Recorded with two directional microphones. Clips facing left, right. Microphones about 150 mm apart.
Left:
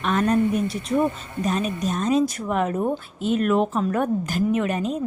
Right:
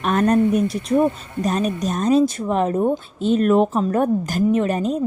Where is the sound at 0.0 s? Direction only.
45° right (ahead or behind).